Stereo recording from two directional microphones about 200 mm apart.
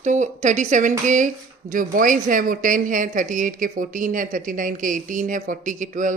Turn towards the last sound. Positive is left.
turn(degrees=-40)  # may be behind; listen again after turning